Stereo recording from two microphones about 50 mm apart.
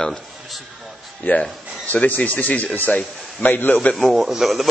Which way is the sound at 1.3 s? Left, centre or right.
Left.